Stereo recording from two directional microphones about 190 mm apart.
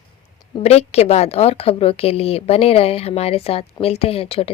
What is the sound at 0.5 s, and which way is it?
A woman's voice, 35° left (ahead or behind).